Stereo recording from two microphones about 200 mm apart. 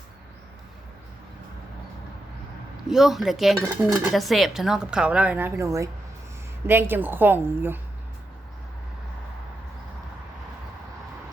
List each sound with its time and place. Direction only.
2.9 s a woman's voice: centre (ahead or behind)
4.1 s a woman's voice: centre (ahead or behind)